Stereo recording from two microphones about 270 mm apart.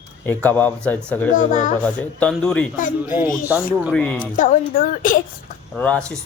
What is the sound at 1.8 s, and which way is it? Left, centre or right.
Speech, centre.